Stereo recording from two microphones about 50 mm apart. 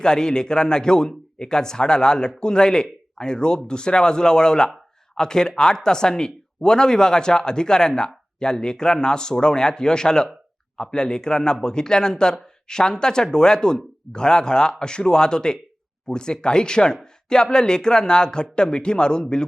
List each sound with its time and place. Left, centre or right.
0.0 s speech: centre